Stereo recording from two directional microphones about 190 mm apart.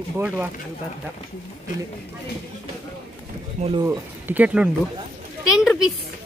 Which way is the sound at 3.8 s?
15° right (ahead or behind).